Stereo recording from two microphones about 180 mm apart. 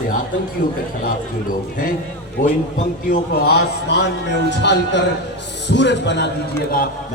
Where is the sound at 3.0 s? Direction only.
60° left (ahead or behind).